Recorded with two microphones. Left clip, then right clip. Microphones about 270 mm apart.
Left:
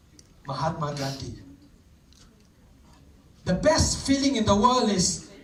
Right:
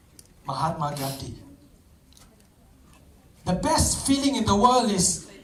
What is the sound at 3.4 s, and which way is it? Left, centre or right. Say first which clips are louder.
Speech: left 2 dB; centre.